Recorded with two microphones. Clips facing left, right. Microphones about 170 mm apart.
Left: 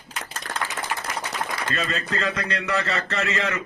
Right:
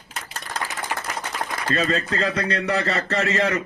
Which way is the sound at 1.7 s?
35° right (ahead or behind).